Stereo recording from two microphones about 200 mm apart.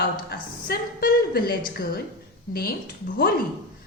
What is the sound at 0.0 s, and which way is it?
A woman's voice, 50° left (ahead or behind).